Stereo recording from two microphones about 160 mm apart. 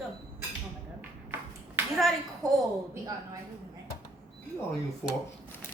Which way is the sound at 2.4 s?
20° right (ahead or behind).